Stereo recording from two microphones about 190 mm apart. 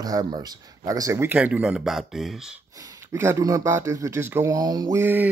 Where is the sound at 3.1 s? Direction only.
15° right (ahead or behind).